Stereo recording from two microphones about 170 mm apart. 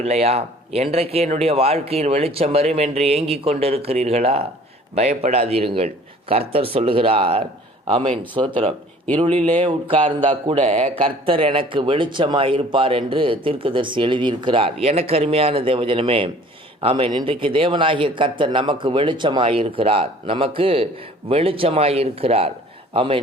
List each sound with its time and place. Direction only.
0.0 s speech: 40° right (ahead or behind)
9.2 s speech: 35° right (ahead or behind)